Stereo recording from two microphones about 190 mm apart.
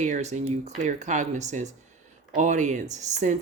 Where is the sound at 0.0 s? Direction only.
40° right (ahead or behind).